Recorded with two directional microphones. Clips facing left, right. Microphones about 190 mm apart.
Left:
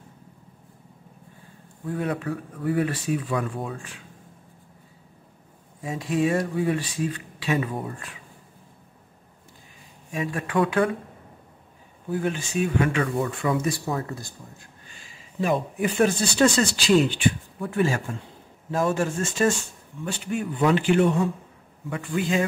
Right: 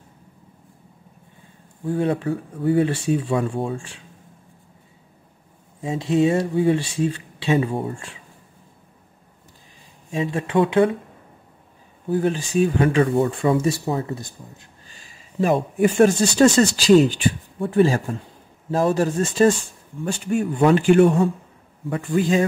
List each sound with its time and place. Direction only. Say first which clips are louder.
1.9 s speech: right 6 dB; 30° right (ahead or behind)
5.8 s speech: right 5 dB; 25° right (ahead or behind)
10.1 s speech: right 4 dB; 25° right (ahead or behind)
12.1 s speech: right 5 dB; 35° right (ahead or behind)
15.4 s speech: right 6 dB; 45° right (ahead or behind)
20.1 s a man's voice: right 6 dB; 45° right (ahead or behind)
21.8 s speech: right 6 dB; 35° right (ahead or behind)